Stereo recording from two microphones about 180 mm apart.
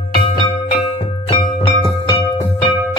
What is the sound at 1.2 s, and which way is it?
Music, 25° left (ahead or behind).